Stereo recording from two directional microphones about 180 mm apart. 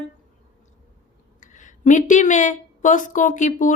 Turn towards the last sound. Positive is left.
turn(degrees=45)  # may be behind; listen again after turning